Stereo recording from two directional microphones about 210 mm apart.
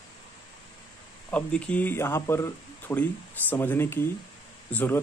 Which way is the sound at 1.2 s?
5° left (ahead or behind).